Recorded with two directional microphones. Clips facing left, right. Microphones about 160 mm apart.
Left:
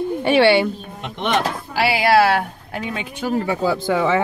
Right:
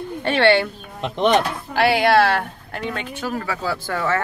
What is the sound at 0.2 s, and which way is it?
Speech, 10° left (ahead or behind).